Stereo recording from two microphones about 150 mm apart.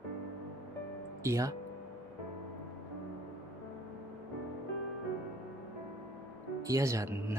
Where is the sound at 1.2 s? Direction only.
20° right (ahead or behind).